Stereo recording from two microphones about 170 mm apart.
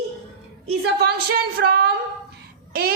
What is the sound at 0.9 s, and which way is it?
A woman's voice, 75° right (ahead or behind).